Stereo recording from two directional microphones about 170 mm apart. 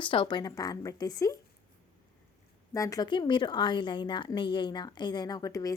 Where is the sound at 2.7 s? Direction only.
20° left (ahead or behind).